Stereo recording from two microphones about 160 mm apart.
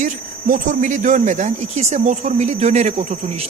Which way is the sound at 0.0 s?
50° right (ahead or behind).